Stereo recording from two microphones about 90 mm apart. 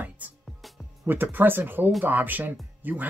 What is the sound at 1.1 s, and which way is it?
Speech, 25° right (ahead or behind).